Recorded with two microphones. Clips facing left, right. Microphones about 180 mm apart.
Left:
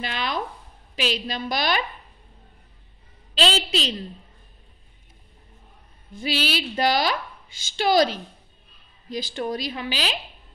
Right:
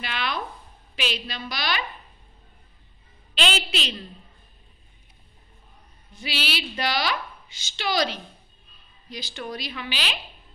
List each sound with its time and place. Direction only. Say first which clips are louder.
0.0 s a woman's voice: left 2 dB; 40° left (ahead or behind)
3.3 s a woman's voice: left 4 dB; 35° left (ahead or behind)
6.1 s a woman's voice: left 5 dB; 45° left (ahead or behind)